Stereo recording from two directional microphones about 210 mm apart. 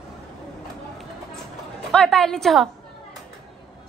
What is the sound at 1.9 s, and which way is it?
Speech, 5° left (ahead or behind).